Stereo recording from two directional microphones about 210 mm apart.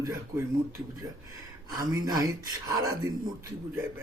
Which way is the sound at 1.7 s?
15° right (ahead or behind).